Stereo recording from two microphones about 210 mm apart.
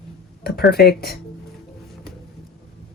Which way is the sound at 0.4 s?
50° left (ahead or behind).